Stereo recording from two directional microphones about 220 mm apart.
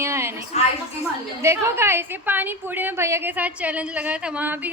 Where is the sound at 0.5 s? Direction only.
30° left (ahead or behind).